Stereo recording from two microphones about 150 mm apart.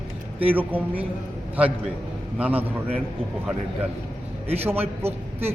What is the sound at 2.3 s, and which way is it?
Speech, 10° right (ahead or behind).